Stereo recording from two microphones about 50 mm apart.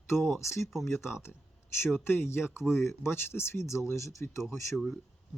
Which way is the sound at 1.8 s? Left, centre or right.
Left.